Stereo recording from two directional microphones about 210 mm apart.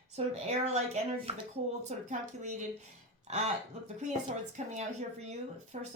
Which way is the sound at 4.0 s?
35° right (ahead or behind).